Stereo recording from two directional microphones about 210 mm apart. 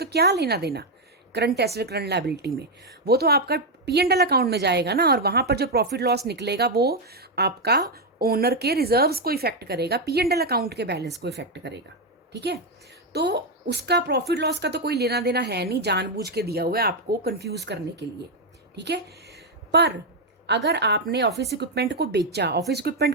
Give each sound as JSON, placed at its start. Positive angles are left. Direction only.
{"t": 0.0, "sound": "a woman's voice", "side_deg": -50}
{"t": 18.8, "sound": "a woman's voice", "side_deg": -50}